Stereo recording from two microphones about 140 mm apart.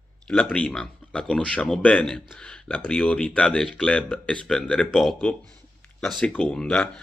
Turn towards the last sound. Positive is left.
turn(degrees=5)  # may be behind; listen again after turning